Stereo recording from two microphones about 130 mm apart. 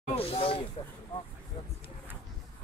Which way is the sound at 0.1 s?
45° left (ahead or behind).